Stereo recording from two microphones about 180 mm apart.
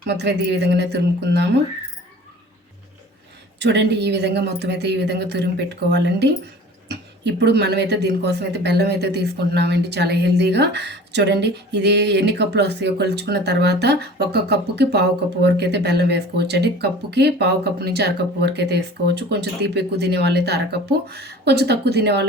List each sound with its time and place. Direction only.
0.1 s speech: 70° right (ahead or behind)
3.6 s speech: 75° right (ahead or behind)